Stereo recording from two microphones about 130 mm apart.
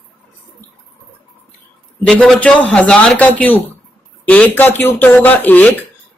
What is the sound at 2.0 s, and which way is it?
Speech, 5° left (ahead or behind).